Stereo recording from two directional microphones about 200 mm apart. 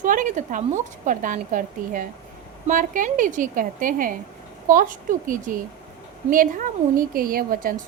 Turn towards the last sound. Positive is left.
turn(degrees=-45)  # may be behind; listen again after turning